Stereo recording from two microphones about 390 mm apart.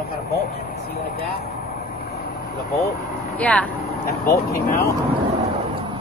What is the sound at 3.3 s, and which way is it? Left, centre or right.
Vehicle, centre.